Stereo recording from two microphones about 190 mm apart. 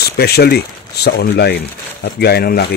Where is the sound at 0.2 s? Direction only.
55° left (ahead or behind).